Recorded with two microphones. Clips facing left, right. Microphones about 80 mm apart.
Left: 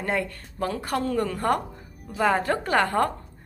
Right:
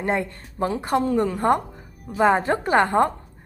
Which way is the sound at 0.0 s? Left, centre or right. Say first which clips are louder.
Right 3 dB; right.